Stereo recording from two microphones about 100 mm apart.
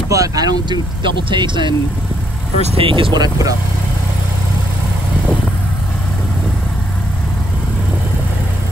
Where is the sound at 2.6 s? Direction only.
70° right (ahead or behind).